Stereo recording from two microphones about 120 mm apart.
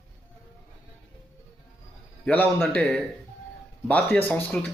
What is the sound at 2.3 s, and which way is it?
Speech, 15° left (ahead or behind).